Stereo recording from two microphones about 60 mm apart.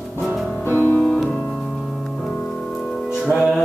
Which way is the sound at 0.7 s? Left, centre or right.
Left.